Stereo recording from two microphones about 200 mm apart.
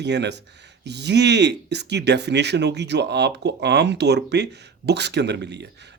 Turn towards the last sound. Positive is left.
turn(degrees=-60)  # may be behind; listen again after turning